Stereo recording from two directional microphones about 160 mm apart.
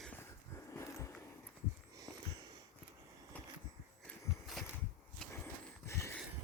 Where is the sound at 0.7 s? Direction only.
15° left (ahead or behind).